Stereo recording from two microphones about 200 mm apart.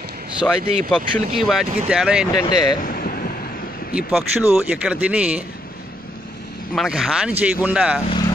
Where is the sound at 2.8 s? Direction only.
45° left (ahead or behind).